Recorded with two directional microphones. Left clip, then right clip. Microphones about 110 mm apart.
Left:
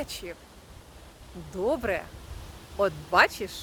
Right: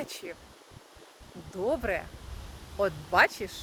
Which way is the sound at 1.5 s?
20° left (ahead or behind).